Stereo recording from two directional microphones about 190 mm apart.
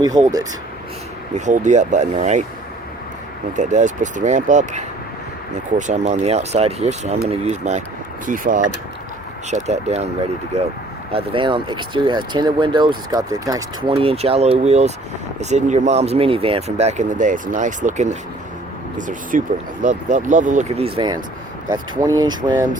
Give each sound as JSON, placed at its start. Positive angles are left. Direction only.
{"t": 0.0, "sound": "speech", "side_deg": -20}
{"t": 1.5, "sound": "speech", "side_deg": -40}
{"t": 3.5, "sound": "speech", "side_deg": -40}
{"t": 11.1, "sound": "speech", "side_deg": -25}
{"t": 13.9, "sound": "speech", "side_deg": -30}